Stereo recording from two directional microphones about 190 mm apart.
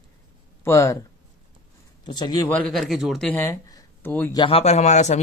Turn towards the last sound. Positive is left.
turn(degrees=35)  # may be behind; listen again after turning